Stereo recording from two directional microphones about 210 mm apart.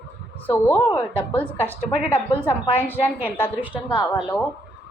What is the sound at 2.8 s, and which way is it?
A woman's voice, 10° left (ahead or behind).